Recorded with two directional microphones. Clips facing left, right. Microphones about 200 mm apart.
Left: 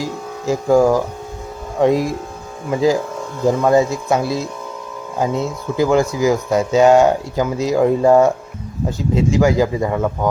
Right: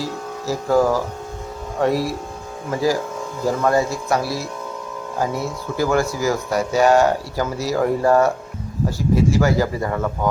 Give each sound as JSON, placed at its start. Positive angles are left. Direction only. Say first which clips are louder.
{"t": 0.0, "sound": "speech", "louder": "left 3 dB", "side_deg": 15}